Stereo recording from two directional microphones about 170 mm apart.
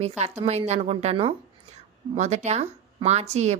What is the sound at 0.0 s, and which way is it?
A woman's voice, 40° right (ahead or behind).